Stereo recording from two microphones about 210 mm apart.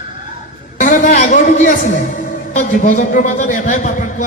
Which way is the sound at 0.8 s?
35° left (ahead or behind).